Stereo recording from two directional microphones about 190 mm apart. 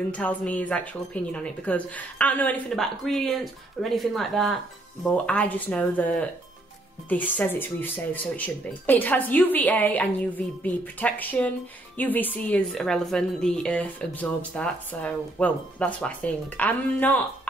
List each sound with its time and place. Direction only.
0.1 s a woman's voice: 5° left (ahead or behind)